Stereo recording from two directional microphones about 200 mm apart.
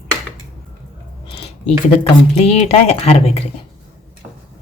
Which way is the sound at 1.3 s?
30° left (ahead or behind).